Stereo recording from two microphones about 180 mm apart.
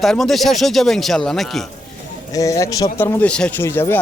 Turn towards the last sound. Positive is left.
turn(degrees=15)  # may be behind; listen again after turning